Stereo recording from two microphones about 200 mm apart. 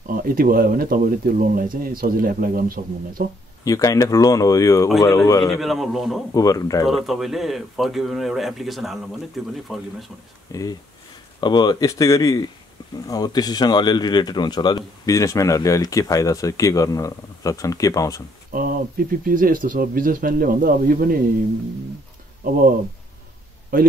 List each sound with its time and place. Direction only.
0.1 s speech: 45° right (ahead or behind)
3.6 s speech: 15° left (ahead or behind)
5.6 s speech: centre (ahead or behind)
6.3 s speech: 15° left (ahead or behind)
6.9 s speech: centre (ahead or behind)
10.5 s speech: 15° left (ahead or behind)
18.5 s speech: 45° right (ahead or behind)